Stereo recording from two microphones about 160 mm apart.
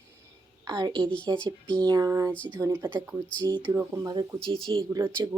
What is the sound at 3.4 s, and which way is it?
Speech, 25° right (ahead or behind).